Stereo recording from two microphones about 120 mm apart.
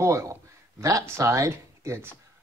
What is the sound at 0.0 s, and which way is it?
Speech, 25° right (ahead or behind).